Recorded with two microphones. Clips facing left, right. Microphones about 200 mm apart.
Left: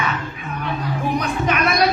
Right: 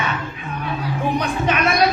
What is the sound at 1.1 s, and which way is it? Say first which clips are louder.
Speech: even; 30° right (ahead or behind).